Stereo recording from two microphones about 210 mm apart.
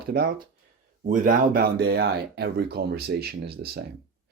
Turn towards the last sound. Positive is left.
turn(degrees=-45)  # may be behind; listen again after turning